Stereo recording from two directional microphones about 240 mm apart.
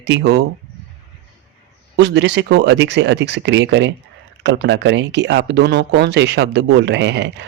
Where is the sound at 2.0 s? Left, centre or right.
Right.